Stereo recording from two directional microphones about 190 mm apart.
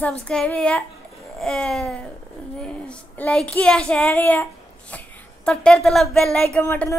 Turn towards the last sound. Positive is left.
turn(degrees=10)  # may be behind; listen again after turning